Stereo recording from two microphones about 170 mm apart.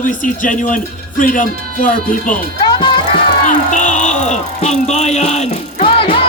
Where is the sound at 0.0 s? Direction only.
50° left (ahead or behind).